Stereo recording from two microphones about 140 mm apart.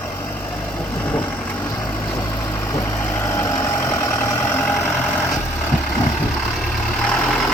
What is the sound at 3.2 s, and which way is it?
Vehicle, 20° left (ahead or behind).